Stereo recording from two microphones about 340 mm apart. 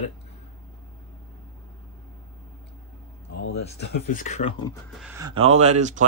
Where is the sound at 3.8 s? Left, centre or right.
Left.